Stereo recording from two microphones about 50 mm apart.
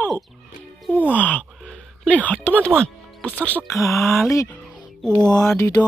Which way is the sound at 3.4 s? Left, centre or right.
Left.